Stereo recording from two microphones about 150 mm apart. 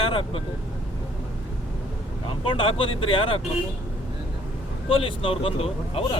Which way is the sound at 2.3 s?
35° left (ahead or behind).